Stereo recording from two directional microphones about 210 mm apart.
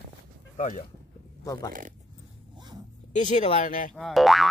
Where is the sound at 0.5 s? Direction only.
35° left (ahead or behind).